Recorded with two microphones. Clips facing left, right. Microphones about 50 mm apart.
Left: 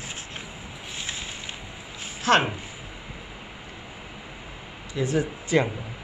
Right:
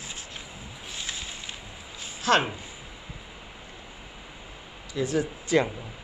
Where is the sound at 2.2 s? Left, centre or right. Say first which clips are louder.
Left 2 dB; left.